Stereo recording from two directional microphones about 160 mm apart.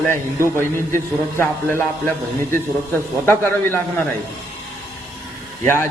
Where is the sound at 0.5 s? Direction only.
15° left (ahead or behind).